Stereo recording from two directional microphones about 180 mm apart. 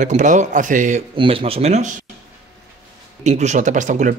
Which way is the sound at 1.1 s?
30° right (ahead or behind).